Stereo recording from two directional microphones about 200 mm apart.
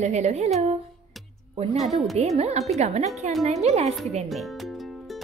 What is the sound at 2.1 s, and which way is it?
A woman's voice, 35° right (ahead or behind).